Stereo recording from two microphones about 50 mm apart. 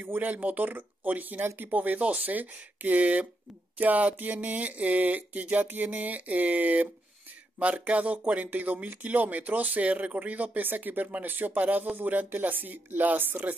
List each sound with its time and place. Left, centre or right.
0.0 s speech: right